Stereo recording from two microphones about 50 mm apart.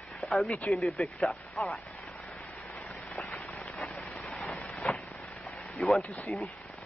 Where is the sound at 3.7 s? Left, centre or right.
Left.